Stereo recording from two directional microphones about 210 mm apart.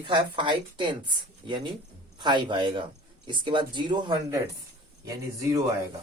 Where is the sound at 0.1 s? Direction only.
20° right (ahead or behind).